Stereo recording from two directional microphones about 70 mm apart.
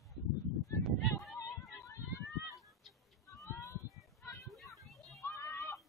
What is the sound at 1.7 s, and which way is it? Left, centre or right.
Emergency vehicle, left.